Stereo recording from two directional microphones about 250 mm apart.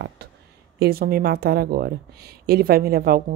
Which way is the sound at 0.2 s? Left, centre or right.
Right.